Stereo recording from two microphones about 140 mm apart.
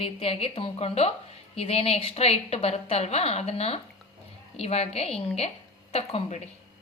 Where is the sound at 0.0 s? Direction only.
40° left (ahead or behind).